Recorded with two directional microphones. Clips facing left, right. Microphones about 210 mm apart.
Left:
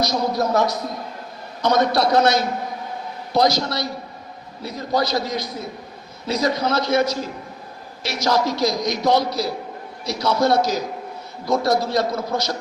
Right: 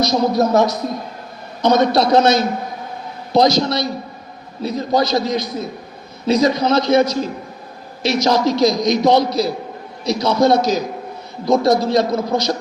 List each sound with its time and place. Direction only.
0.0 s a man's voice: 20° right (ahead or behind)